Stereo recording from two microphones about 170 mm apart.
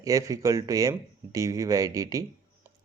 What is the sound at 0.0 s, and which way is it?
Speech, 20° right (ahead or behind).